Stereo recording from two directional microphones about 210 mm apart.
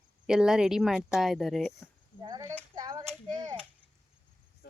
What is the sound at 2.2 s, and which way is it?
Speech, 20° right (ahead or behind).